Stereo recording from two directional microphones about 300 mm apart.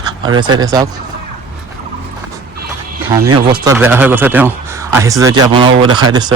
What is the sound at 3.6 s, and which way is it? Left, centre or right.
A man's voice, centre.